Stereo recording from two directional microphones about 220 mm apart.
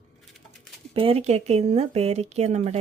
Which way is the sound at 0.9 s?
25° right (ahead or behind).